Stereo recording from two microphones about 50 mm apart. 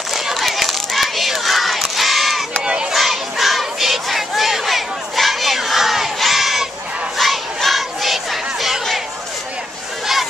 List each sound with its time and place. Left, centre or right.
0.1 s a sound: centre
2.6 s crowd: centre
2.9 s battle cry: centre
7.2 s crowd: centre